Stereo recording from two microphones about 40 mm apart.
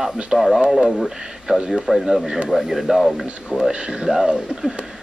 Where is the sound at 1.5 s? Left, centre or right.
Centre.